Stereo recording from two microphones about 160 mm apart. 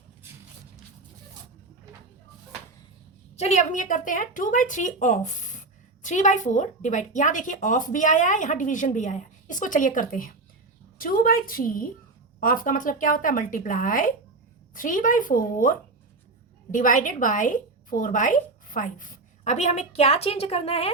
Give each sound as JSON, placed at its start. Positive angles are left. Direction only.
{"t": 3.3, "sound": "a woman's voice", "side_deg": 45}
{"t": 16.7, "sound": "a woman's voice", "side_deg": 55}